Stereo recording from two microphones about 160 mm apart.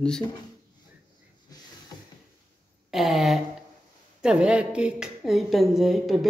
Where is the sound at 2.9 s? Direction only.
Centre (ahead or behind).